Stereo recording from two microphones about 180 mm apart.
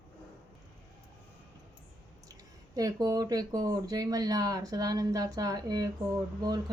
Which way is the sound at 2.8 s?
20° right (ahead or behind).